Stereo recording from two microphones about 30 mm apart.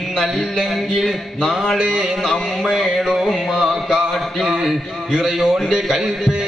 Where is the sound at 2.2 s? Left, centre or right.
Centre.